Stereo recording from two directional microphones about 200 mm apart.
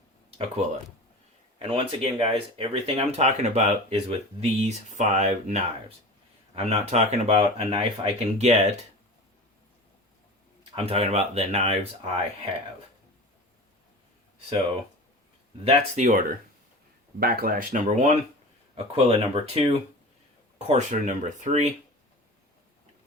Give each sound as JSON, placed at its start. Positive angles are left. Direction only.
{"t": 0.3, "sound": "speech", "side_deg": -30}
{"t": 10.8, "sound": "speech", "side_deg": -30}
{"t": 15.6, "sound": "speech", "side_deg": -40}